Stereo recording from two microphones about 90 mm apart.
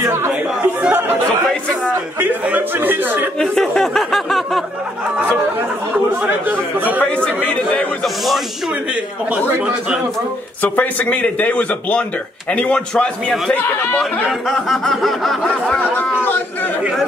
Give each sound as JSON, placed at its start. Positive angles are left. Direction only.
{"t": 0.3, "sound": "chatter", "side_deg": -10}
{"t": 2.1, "sound": "a man's voice", "side_deg": -20}
{"t": 3.3, "sound": "speech", "side_deg": 10}
{"t": 6.2, "sound": "a man's voice", "side_deg": -20}
{"t": 10.6, "sound": "a man's voice", "side_deg": 20}
{"t": 15.8, "sound": "speech", "side_deg": 20}